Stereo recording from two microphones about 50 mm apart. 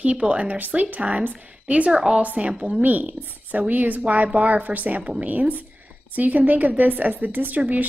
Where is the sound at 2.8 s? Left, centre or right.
Right.